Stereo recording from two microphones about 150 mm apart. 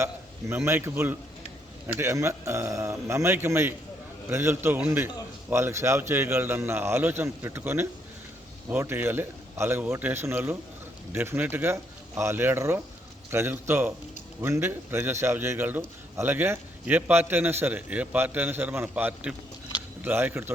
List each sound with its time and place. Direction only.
0.0 s a man's voice: 15° right (ahead or behind)